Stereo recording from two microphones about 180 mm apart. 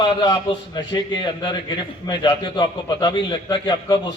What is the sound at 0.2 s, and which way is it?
A man's voice, 25° left (ahead or behind).